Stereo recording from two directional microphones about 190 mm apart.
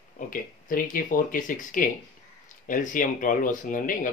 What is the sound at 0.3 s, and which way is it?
Speech, 45° left (ahead or behind).